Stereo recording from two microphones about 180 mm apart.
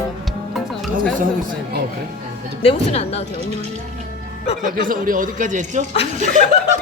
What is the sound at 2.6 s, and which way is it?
Speech, 35° left (ahead or behind).